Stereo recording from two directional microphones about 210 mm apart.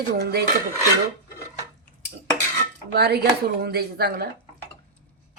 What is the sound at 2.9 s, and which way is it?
Speech, 50° right (ahead or behind).